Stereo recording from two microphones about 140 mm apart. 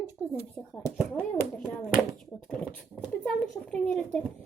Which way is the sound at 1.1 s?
5° left (ahead or behind).